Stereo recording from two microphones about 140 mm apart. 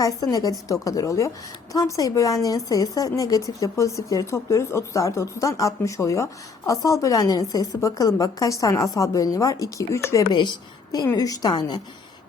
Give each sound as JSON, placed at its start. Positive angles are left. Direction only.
{"t": 0.0, "sound": "speech", "side_deg": 25}